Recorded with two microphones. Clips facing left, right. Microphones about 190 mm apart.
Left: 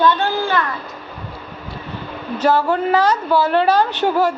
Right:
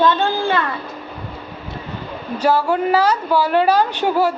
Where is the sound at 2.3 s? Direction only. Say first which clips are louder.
Even; 10° right (ahead or behind).